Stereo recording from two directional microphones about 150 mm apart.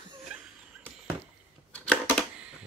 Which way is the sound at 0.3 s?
5° right (ahead or behind).